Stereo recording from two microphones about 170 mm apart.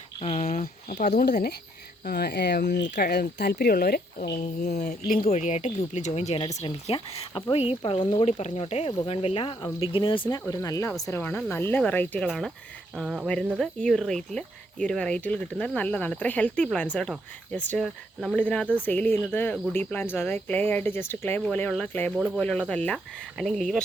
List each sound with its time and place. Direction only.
0.2 s a sound: 35° left (ahead or behind)
0.6 s speech: 55° left (ahead or behind)
1.3 s speech: 60° left (ahead or behind)
2.0 s speech: 70° left (ahead or behind)
4.7 s speech: 45° left (ahead or behind)
5.3 s speech: 45° left (ahead or behind); by 23.8 s 5° left (ahead or behind)